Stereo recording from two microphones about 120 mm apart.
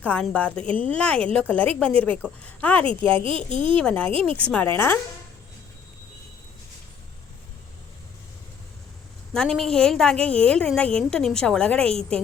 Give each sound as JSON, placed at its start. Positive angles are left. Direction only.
{"t": 0.0, "sound": "a woman's voice", "side_deg": 10}
{"t": 0.7, "sound": "speech", "side_deg": -50}
{"t": 0.9, "sound": "a woman's voice", "side_deg": 10}
{"t": 2.8, "sound": "speech", "side_deg": -50}
{"t": 3.8, "sound": "a woman's voice", "side_deg": 10}
{"t": 4.1, "sound": "speech", "side_deg": -50}
{"t": 4.4, "sound": "a woman's voice", "side_deg": 10}
{"t": 9.3, "sound": "a woman's voice", "side_deg": 5}